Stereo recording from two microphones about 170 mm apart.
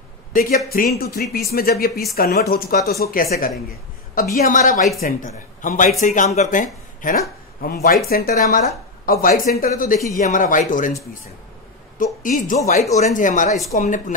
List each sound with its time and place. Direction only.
0.3 s speech: 55° left (ahead or behind)
12.0 s speech: 50° left (ahead or behind)